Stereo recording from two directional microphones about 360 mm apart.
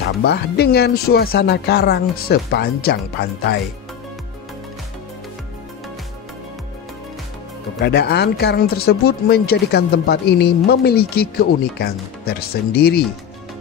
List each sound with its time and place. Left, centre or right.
0.2 s speech: left
7.8 s speech: left